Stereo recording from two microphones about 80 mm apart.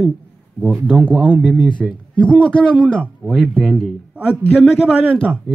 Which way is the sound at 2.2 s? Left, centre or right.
Centre.